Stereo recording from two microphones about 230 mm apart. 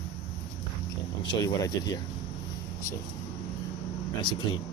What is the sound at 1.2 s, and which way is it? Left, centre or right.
Speech, centre.